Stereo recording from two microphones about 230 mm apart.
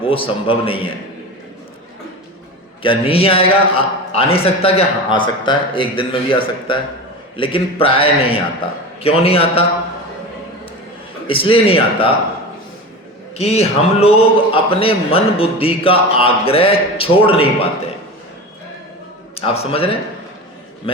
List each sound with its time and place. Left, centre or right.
0.0 s a man's voice: left
2.8 s a man's voice: left
11.3 s a man's voice: left
13.3 s a man's voice: left
19.4 s a man's voice: left